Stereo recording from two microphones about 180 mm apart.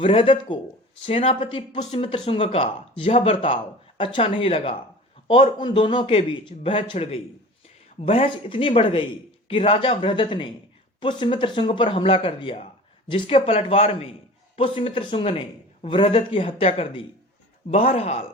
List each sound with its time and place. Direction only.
0.0 s speech: 30° left (ahead or behind)